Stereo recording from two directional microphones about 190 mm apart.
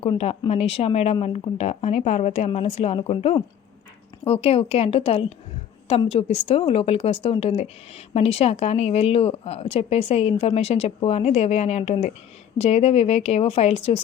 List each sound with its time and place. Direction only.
0.0 s a woman's voice: 30° left (ahead or behind)